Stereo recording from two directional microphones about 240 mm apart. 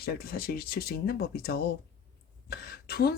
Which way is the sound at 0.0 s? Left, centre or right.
Left.